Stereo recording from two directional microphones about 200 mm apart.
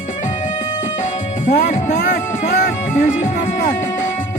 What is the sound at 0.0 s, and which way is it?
Music, 40° left (ahead or behind).